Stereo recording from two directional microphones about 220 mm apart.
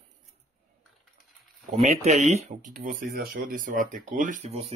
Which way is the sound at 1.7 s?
30° right (ahead or behind).